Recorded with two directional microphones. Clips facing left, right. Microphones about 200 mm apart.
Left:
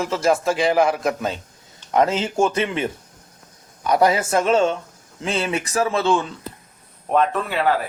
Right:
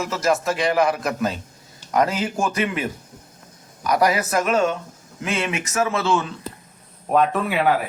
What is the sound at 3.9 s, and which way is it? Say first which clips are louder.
A man's voice: left 2 dB; 30° left (ahead or behind).